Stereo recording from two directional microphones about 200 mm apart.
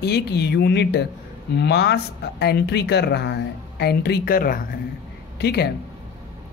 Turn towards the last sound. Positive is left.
turn(degrees=55)  # may be behind; listen again after turning